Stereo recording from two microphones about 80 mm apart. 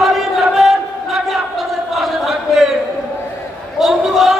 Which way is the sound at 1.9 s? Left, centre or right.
Centre.